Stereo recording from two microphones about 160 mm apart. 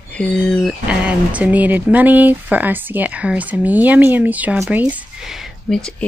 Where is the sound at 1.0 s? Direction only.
10° right (ahead or behind).